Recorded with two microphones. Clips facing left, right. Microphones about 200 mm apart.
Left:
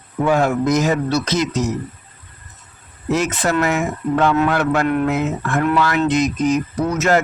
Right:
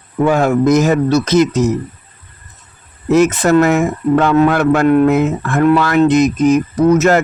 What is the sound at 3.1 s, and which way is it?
Speech, 50° right (ahead or behind).